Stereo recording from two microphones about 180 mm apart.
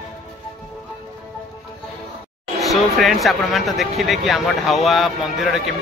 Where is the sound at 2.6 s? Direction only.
Centre (ahead or behind).